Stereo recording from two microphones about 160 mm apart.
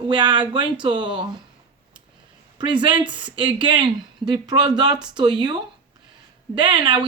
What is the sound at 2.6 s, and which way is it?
Speech, 30° right (ahead or behind).